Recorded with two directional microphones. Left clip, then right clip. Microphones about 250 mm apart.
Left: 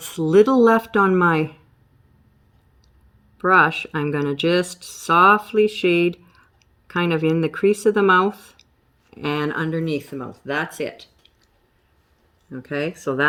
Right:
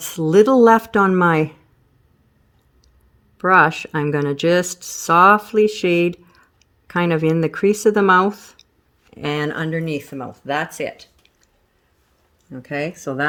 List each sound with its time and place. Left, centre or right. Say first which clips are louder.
0.0 s speech: right 1 dB; right
3.3 s speech: right 2 dB; right
12.5 s speech: right 1 dB; right